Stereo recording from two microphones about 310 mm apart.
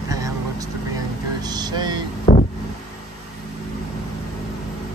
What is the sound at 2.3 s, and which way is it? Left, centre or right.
Vehicle, left.